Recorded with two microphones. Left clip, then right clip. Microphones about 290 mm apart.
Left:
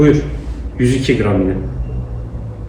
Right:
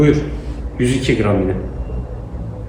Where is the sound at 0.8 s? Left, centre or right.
Centre.